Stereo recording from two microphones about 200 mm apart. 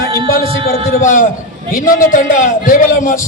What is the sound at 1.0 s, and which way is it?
A man's voice, 40° left (ahead or behind).